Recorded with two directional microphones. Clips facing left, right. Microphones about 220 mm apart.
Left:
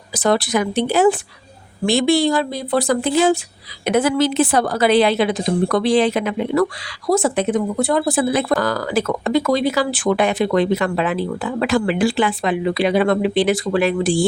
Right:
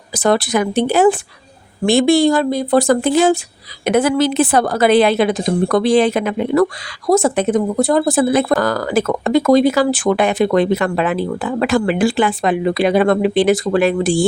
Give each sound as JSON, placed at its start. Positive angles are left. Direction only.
{"t": 0.1, "sound": "speech", "side_deg": -50}